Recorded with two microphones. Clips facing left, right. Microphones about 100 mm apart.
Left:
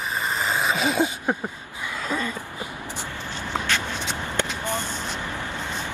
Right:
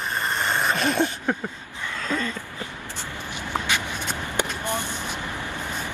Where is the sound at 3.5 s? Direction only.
15° right (ahead or behind).